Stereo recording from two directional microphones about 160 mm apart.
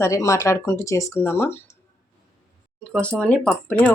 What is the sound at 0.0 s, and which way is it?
Speech, 20° left (ahead or behind).